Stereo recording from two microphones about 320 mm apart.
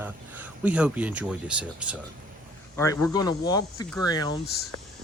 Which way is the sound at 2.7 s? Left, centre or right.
Centre.